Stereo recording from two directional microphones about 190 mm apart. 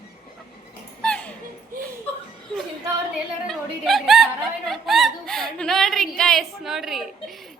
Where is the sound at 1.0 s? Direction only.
5° left (ahead or behind).